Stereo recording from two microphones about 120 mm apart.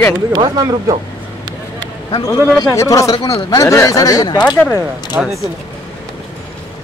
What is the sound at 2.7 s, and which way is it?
Speech, 25° left (ahead or behind).